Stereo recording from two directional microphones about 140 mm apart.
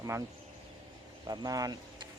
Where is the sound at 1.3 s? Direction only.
25° right (ahead or behind).